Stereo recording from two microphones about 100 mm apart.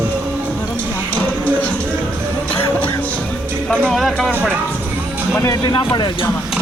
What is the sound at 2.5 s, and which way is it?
Music, 20° left (ahead or behind).